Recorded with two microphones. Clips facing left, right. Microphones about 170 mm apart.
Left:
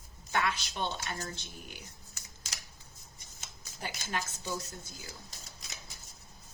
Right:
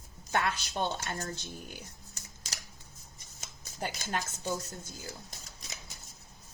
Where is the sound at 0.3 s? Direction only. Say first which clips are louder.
Right 1 dB; 45° right (ahead or behind).